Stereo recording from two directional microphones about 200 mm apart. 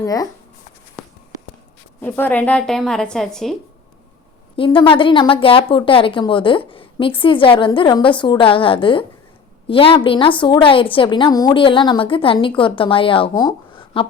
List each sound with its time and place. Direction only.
0.0 s speech: 20° left (ahead or behind)
2.0 s a woman's voice: 10° left (ahead or behind)
4.5 s speech: 25° left (ahead or behind)